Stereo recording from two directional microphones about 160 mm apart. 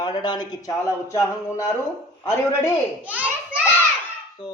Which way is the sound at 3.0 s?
10° right (ahead or behind).